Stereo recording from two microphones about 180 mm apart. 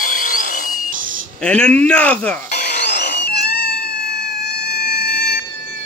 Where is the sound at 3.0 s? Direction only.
70° left (ahead or behind).